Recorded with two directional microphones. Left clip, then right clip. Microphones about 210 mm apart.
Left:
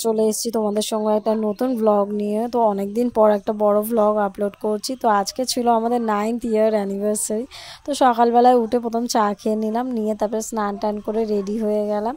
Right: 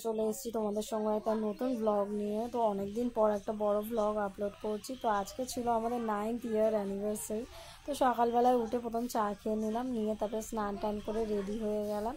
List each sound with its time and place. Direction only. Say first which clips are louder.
0.0 s speech: left 14 dB; 50° left (ahead or behind)